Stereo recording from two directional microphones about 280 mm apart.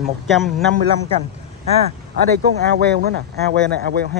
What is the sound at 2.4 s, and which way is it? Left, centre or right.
Speech, right.